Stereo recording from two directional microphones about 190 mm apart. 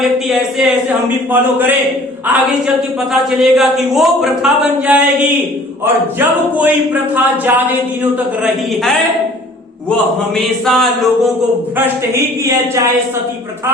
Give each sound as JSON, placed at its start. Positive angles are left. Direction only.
{"t": 0.0, "sound": "a woman's voice", "side_deg": 0}
{"t": 1.3, "sound": "a sound", "side_deg": -10}
{"t": 2.2, "sound": "a woman's voice", "side_deg": -5}
{"t": 4.9, "sound": "a sound", "side_deg": -5}
{"t": 8.7, "sound": "a woman's voice", "side_deg": 0}
{"t": 10.7, "sound": "a woman's voice", "side_deg": 0}